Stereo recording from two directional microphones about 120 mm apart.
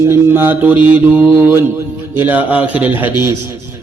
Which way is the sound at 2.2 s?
15° right (ahead or behind).